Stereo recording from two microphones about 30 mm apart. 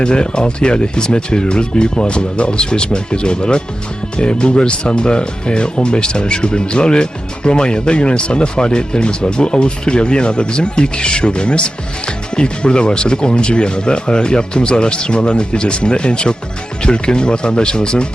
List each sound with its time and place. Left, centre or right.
0.0 s speech: left